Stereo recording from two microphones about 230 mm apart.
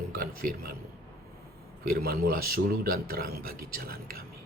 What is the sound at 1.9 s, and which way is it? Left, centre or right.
Speech, right.